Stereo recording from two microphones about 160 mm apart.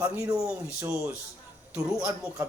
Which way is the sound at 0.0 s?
20° right (ahead or behind).